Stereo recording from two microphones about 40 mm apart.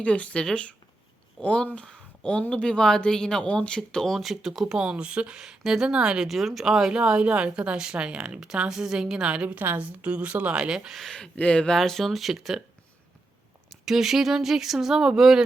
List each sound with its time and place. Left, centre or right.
0.0 s speech: left
1.9 s a sound: left
2.5 s speech: left
3.8 s speech: centre
4.2 s a woman's voice: centre; by 5.4 s right
5.4 s a woman's voice: centre
6.2 s speech: centre
6.9 s a woman's voice: right
9.3 s a woman's voice: right
11.3 s speech: left
11.9 s speech: centre
13.8 s speech: centre